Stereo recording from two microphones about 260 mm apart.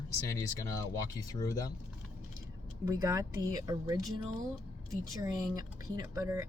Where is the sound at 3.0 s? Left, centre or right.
Centre.